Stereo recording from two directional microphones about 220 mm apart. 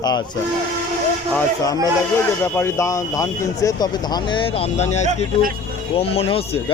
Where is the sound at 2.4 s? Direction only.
10° left (ahead or behind).